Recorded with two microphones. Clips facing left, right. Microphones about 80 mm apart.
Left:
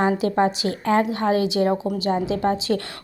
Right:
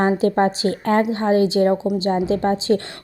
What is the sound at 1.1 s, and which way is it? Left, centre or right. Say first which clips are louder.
A woman's voice: right 3 dB; right.